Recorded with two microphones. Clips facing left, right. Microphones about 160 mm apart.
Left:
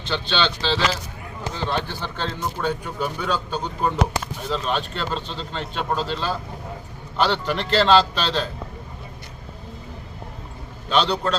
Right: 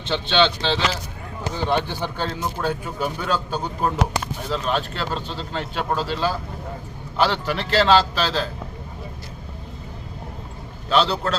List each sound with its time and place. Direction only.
0.0 s speech: 25° right (ahead or behind); by 8.4 s 5° right (ahead or behind)
10.8 s speech: 5° right (ahead or behind)